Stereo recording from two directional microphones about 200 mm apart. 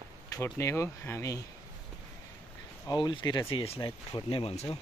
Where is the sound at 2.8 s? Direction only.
20° left (ahead or behind).